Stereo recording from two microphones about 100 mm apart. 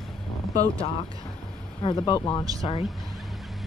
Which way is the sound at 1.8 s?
45° left (ahead or behind).